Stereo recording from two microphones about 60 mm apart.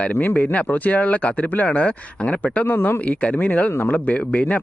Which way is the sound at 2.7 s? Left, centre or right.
Left.